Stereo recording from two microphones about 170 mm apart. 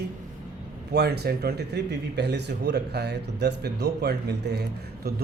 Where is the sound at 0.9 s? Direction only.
70° right (ahead or behind).